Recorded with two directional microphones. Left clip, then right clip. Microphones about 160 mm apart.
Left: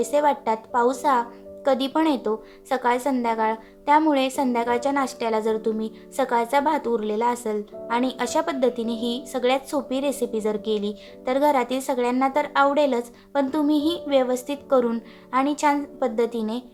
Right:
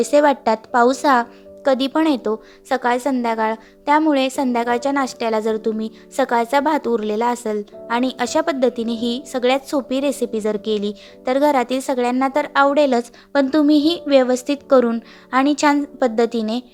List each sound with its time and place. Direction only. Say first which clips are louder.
0.0 s a woman's voice: right 6 dB; 35° right (ahead or behind)